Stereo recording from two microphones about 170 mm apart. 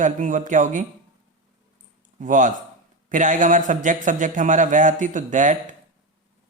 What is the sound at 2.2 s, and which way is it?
A man's voice, 50° right (ahead or behind).